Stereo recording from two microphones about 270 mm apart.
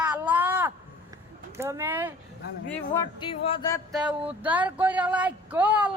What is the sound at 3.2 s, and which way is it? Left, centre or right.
Speech, centre.